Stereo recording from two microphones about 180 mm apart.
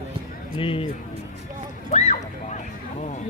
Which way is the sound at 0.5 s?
30° left (ahead or behind).